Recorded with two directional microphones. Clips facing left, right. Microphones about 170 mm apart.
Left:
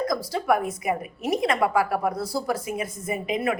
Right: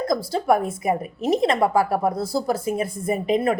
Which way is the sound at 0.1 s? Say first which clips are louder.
Right 3 dB; 30° right (ahead or behind).